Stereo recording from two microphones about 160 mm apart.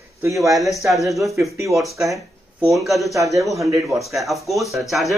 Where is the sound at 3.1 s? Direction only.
20° right (ahead or behind).